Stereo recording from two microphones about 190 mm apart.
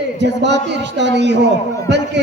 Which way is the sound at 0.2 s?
65° right (ahead or behind).